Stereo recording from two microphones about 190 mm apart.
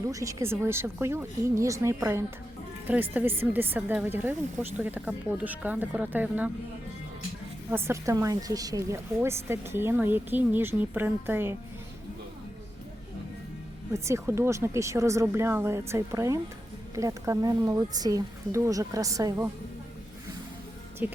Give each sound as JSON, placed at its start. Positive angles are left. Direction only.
{"t": 0.1, "sound": "speech", "side_deg": -15}
{"t": 7.7, "sound": "speech", "side_deg": -15}
{"t": 13.9, "sound": "speech", "side_deg": -15}
{"t": 21.0, "sound": "speech", "side_deg": -10}